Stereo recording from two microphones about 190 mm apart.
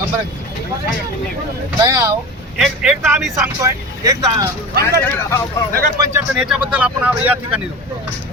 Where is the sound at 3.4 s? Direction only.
15° right (ahead or behind).